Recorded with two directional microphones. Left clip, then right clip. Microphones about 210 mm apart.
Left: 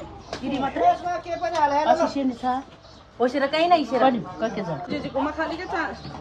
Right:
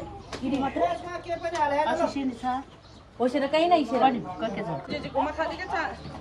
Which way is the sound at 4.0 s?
40° left (ahead or behind).